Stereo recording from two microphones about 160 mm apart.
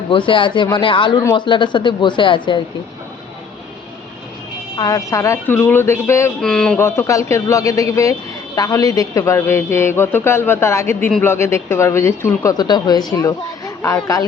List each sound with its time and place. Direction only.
0.1 s speech: 30° left (ahead or behind)
4.8 s a man's voice: 20° left (ahead or behind)
6.4 s a sound: 5° left (ahead or behind)
6.7 s a man's voice: 15° left (ahead or behind)